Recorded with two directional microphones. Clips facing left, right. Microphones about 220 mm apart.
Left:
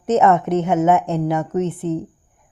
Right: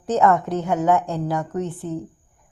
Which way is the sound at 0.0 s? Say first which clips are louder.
Left 3 dB; 20° left (ahead or behind).